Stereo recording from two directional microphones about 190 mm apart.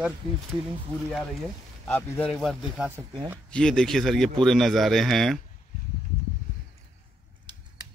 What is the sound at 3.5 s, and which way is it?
Speech, 5° left (ahead or behind).